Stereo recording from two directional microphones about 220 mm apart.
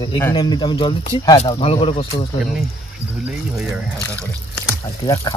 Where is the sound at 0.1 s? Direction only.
20° left (ahead or behind).